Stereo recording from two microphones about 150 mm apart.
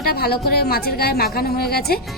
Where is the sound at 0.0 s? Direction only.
90° left.